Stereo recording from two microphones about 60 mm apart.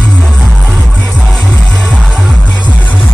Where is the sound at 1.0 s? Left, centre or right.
Centre.